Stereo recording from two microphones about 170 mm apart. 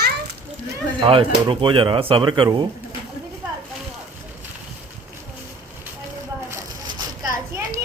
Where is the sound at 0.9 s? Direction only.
30° right (ahead or behind).